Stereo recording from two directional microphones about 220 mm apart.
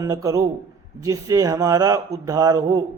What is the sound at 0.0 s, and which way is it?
A man's voice, 15° right (ahead or behind).